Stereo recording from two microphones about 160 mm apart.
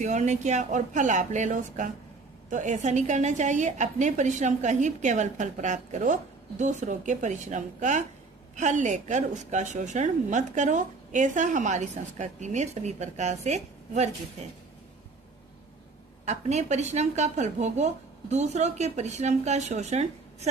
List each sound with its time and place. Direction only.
0.0 s a woman's voice: 45° right (ahead or behind)
16.2 s a woman's voice: 45° right (ahead or behind)